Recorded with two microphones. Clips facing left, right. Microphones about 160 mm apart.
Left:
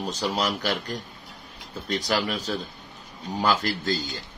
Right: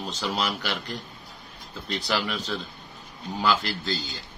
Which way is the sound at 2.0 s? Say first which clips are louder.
Left 1 dB; 40° left (ahead or behind).